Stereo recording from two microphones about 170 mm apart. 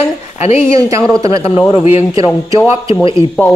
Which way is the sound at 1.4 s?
35° left (ahead or behind).